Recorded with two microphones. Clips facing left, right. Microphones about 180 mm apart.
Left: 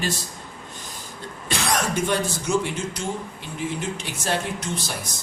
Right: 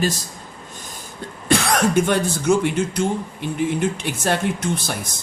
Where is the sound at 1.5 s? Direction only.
55° right (ahead or behind).